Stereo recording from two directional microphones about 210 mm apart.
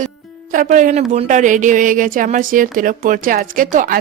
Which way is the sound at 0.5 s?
40° right (ahead or behind).